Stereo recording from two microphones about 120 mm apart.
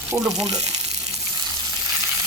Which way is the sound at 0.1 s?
30° right (ahead or behind).